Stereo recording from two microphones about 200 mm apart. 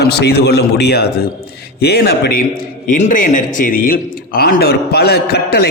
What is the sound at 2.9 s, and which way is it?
A man's voice, 35° left (ahead or behind).